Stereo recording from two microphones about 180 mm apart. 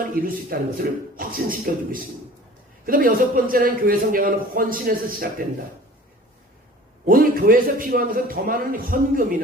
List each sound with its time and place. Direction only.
0.0 s a man's voice: 50° right (ahead or behind)
7.0 s a man's voice: 55° right (ahead or behind)